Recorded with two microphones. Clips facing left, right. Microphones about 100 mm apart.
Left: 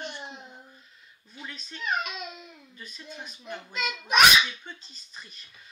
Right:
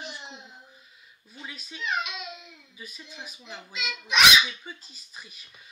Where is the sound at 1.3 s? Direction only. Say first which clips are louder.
Even; 5° right (ahead or behind).